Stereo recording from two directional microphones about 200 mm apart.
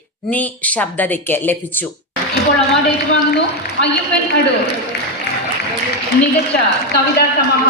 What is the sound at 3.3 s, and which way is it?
Speech, 60° left (ahead or behind).